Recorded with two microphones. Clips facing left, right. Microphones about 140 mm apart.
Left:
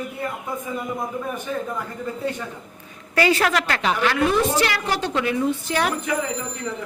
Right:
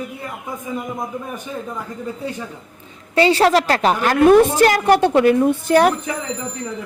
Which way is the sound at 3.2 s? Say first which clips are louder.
Right 6 dB; 30° right (ahead or behind).